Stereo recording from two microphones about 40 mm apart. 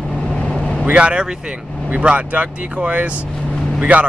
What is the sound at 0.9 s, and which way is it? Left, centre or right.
Speech, right.